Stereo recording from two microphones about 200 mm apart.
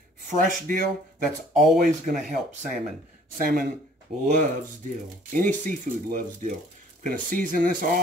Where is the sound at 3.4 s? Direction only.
45° right (ahead or behind).